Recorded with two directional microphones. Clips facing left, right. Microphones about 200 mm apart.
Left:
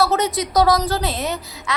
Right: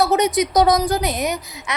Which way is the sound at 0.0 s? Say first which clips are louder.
Right 2 dB; 20° right (ahead or behind).